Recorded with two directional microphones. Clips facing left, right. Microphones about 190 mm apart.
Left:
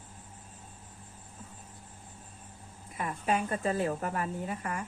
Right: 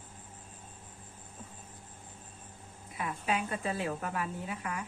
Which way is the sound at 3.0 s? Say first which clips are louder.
Left 3 dB; 45° left (ahead or behind).